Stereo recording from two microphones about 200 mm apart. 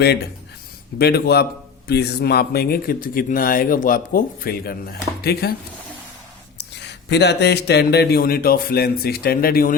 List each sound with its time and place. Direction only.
0.9 s speech: 55° left (ahead or behind)
6.6 s speech: 60° left (ahead or behind)